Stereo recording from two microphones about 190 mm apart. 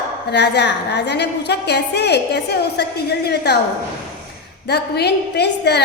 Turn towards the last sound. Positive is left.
turn(degrees=60)  # may be behind; listen again after turning